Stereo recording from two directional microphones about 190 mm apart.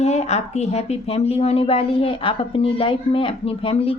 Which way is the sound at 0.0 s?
35° left (ahead or behind).